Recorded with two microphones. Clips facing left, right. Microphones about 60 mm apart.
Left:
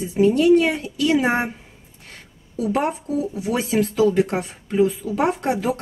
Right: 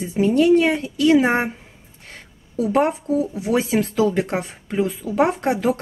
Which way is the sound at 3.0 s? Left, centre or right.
Right.